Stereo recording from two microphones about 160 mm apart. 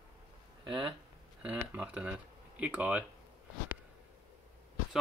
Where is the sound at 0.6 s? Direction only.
30° right (ahead or behind).